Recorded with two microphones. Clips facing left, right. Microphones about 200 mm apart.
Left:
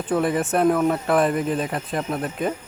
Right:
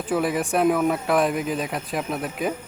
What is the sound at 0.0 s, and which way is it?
Speech, centre (ahead or behind).